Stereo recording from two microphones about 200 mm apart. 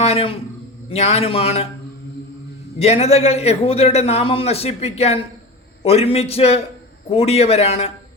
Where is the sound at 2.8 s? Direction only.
30° left (ahead or behind).